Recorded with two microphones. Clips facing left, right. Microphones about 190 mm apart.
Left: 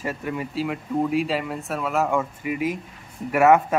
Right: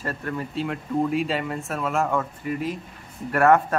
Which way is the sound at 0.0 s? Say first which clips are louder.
Left 1 dB; 10° left (ahead or behind).